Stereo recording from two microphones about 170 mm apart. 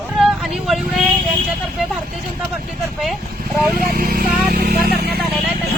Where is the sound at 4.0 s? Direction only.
60° right (ahead or behind).